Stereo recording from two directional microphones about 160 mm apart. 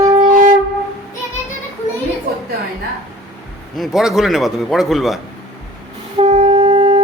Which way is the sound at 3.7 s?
Centre (ahead or behind).